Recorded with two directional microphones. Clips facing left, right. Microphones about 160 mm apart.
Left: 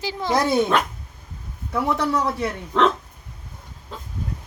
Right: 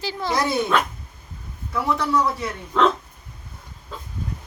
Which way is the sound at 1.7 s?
55° left (ahead or behind).